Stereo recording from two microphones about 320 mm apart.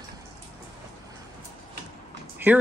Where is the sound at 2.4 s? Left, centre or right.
Centre.